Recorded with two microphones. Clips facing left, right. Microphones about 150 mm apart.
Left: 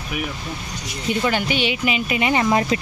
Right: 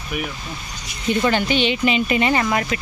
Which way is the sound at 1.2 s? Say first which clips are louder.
Right 3 dB; 10° left (ahead or behind).